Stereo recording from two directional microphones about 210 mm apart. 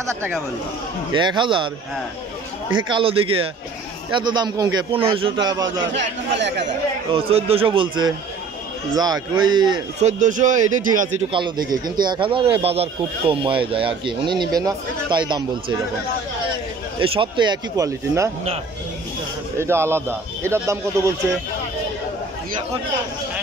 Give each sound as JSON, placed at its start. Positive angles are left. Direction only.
{"t": 1.1, "sound": "speech", "side_deg": -20}
{"t": 2.9, "sound": "speech", "side_deg": -25}
{"t": 5.9, "sound": "speech", "side_deg": -55}
{"t": 7.1, "sound": "speech", "side_deg": -25}
{"t": 10.0, "sound": "speech", "side_deg": -35}
{"t": 11.3, "sound": "speech", "side_deg": -20}
{"t": 17.0, "sound": "speech", "side_deg": -25}
{"t": 19.6, "sound": "speech", "side_deg": -10}